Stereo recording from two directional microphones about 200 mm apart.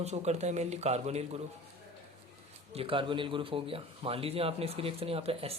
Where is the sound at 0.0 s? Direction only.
35° right (ahead or behind).